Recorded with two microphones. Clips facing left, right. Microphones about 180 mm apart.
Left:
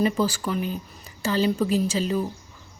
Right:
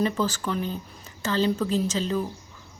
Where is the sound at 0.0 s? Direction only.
10° left (ahead or behind).